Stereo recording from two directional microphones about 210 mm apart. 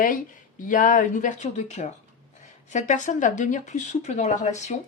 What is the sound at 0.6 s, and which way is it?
Speech, 40° left (ahead or behind).